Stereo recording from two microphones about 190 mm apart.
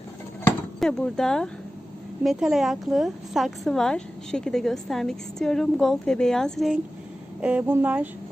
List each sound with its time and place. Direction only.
0.8 s a woman's voice: 5° left (ahead or behind)
7.4 s speech: 10° right (ahead or behind)